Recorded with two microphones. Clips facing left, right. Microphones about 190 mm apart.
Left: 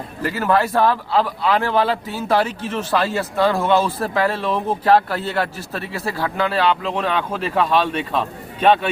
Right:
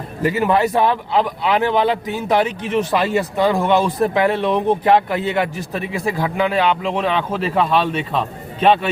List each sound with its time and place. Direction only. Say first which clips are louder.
0.2 s a man's voice: right 3 dB; 15° right (ahead or behind)